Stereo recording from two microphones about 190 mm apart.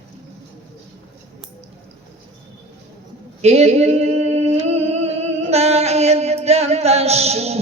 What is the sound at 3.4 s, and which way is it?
Singing, 35° right (ahead or behind).